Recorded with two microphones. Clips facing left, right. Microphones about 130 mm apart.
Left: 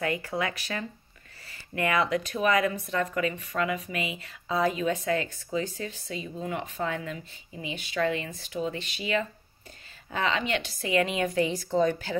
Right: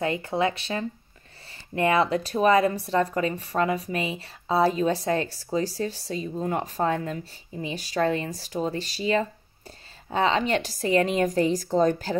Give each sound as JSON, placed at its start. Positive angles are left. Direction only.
{"t": 0.0, "sound": "speech", "side_deg": -25}